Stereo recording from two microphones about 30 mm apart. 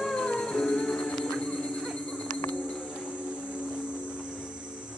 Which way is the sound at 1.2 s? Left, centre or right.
Left.